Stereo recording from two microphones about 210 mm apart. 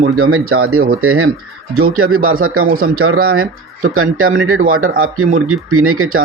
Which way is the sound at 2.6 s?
45° right (ahead or behind).